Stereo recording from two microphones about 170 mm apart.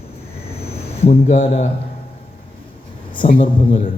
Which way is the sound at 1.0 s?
35° left (ahead or behind).